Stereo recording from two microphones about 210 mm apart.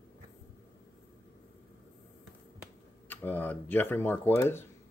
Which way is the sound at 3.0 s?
10° left (ahead or behind).